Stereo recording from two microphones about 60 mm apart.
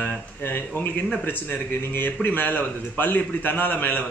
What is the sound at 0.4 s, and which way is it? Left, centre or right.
A man's voice, left.